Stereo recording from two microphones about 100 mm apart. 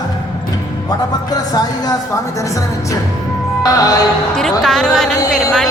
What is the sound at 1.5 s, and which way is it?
Speech, 40° left (ahead or behind).